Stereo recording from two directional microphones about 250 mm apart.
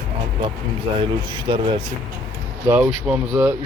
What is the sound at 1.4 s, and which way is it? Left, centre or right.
Speech, centre.